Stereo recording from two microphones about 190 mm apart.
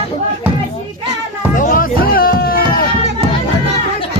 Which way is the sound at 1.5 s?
45° left (ahead or behind).